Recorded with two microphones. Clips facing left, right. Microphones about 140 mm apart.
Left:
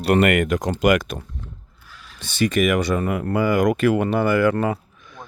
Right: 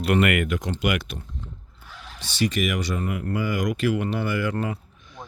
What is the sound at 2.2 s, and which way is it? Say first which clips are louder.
Speech: left 5 dB; 50° left (ahead or behind).